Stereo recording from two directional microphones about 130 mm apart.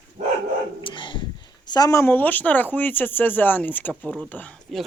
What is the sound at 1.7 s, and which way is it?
Speech, 30° left (ahead or behind).